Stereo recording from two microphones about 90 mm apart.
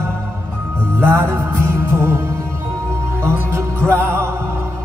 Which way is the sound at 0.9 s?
30° right (ahead or behind).